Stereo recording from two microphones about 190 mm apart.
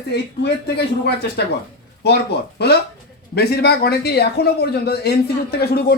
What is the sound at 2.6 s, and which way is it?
Speech, 60° left (ahead or behind).